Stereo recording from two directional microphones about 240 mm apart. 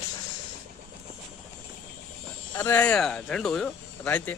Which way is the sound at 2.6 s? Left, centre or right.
Centre.